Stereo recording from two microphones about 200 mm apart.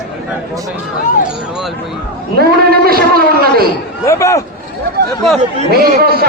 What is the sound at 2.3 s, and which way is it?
Speech, 50° right (ahead or behind).